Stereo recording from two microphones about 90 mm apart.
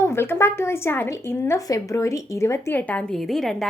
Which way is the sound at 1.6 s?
40° left (ahead or behind).